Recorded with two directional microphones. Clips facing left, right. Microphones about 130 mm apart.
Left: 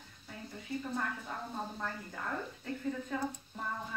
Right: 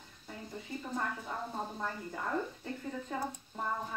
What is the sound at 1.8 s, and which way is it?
Speech, 25° right (ahead or behind).